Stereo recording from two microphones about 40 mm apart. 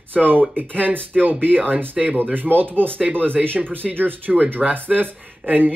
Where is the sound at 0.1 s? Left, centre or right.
Right.